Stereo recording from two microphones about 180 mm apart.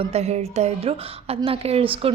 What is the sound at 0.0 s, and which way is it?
A woman's voice, 35° right (ahead or behind).